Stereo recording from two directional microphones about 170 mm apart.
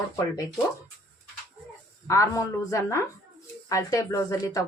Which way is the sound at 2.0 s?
20° left (ahead or behind).